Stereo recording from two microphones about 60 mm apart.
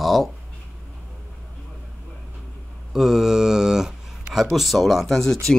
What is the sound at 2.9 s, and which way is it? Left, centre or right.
Speech, centre.